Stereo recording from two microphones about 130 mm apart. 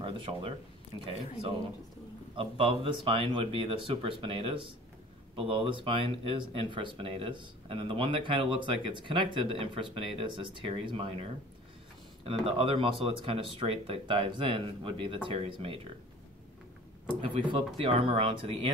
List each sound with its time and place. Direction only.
0.0 s speech: 40° right (ahead or behind)
2.3 s speech: 45° right (ahead or behind)
12.3 s speech: 45° right (ahead or behind)
17.2 s speech: 45° right (ahead or behind)